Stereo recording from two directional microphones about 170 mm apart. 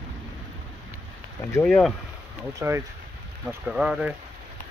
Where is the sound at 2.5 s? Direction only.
15° right (ahead or behind).